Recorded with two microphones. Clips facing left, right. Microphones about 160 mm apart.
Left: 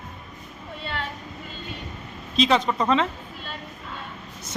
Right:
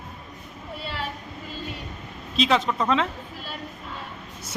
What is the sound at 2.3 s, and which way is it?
Speech, centre (ahead or behind).